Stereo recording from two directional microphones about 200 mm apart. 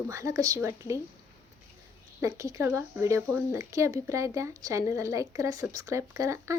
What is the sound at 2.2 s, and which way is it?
Speech, 15° right (ahead or behind).